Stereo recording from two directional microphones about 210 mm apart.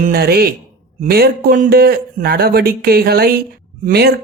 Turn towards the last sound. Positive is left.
turn(degrees=-50)  # may be behind; listen again after turning